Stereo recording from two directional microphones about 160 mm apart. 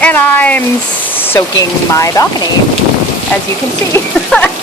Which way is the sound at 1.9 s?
20° left (ahead or behind).